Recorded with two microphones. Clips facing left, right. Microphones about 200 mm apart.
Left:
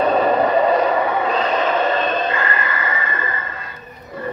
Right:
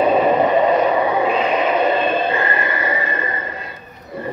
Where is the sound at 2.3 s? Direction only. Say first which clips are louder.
Right 2 dB; 25° right (ahead or behind).